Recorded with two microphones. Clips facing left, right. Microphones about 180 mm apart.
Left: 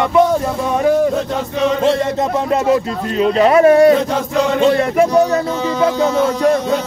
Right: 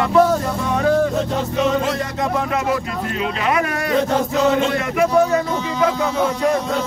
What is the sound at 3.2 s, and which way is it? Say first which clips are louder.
Speech: left 11 dB; 35° left (ahead or behind).